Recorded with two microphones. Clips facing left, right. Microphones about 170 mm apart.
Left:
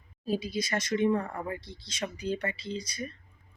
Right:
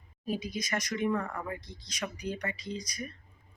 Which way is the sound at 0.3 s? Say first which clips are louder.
Left 3 dB; 30° left (ahead or behind).